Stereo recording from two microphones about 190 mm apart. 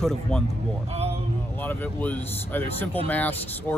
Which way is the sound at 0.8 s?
30° right (ahead or behind).